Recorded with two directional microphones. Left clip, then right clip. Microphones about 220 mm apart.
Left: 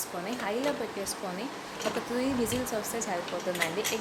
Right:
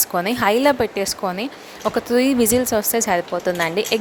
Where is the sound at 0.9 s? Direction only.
45° right (ahead or behind).